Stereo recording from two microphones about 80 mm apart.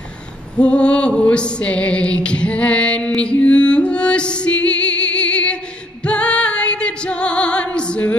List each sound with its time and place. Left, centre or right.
0.6 s music: centre